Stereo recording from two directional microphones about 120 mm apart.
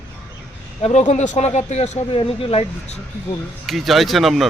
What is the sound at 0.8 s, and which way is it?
Speech, 75° left (ahead or behind).